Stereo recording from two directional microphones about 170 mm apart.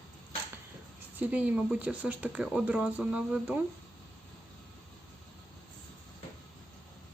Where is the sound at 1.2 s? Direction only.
5° right (ahead or behind).